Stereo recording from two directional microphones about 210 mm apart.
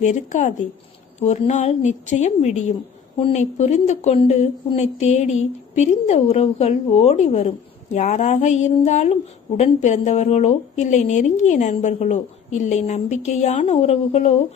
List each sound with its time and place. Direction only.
0.0 s speech: 35° left (ahead or behind)